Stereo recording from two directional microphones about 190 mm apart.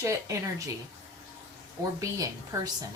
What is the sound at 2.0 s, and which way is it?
Speech, 15° right (ahead or behind).